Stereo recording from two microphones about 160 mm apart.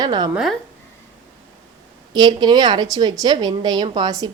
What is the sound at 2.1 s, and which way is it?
A woman's voice, 25° right (ahead or behind).